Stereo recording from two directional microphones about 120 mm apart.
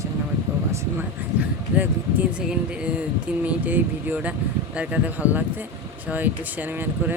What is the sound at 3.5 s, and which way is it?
Speech, 15° right (ahead or behind).